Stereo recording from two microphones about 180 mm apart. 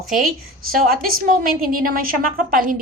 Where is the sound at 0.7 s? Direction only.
55° right (ahead or behind).